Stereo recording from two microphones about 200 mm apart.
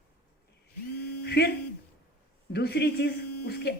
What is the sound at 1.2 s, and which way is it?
Speech, 55° left (ahead or behind).